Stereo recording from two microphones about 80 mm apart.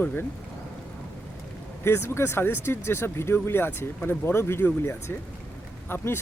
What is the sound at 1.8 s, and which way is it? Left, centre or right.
Speech, left.